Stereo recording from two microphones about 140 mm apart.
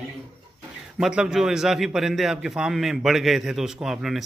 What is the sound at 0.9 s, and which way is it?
A man's voice, 5° right (ahead or behind).